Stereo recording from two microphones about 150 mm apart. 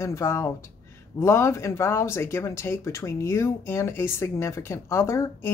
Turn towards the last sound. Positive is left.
turn(degrees=15)  # may be behind; listen again after turning